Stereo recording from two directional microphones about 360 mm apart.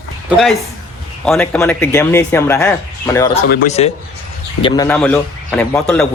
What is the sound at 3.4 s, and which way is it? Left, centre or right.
Speech, left.